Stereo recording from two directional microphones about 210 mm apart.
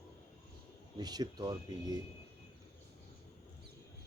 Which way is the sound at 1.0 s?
20° right (ahead or behind).